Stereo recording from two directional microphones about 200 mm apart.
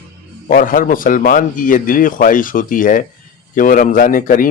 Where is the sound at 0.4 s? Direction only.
45° left (ahead or behind).